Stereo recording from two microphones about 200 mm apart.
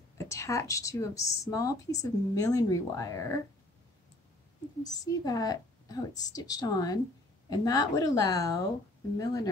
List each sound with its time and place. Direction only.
0.2 s a woman's voice: 15° left (ahead or behind)
4.8 s a woman's voice: 20° left (ahead or behind)